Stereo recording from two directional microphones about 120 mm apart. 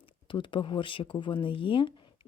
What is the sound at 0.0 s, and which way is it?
Speech, 45° left (ahead or behind).